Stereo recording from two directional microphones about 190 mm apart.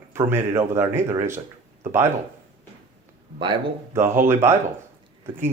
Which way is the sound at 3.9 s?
15° right (ahead or behind).